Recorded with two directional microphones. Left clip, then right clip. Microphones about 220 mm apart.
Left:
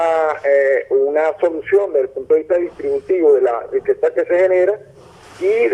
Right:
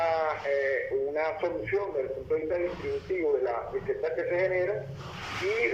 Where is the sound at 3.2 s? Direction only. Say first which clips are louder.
Left 15 dB; 55° left (ahead or behind).